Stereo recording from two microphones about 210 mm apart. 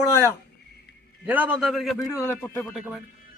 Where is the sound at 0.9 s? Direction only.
50° left (ahead or behind).